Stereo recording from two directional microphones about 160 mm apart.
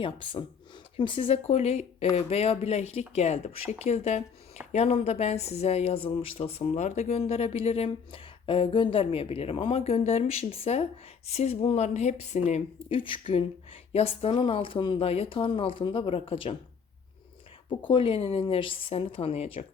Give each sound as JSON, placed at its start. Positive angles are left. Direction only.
{"t": 0.0, "sound": "a woman's voice", "side_deg": 30}
{"t": 17.8, "sound": "speech", "side_deg": 30}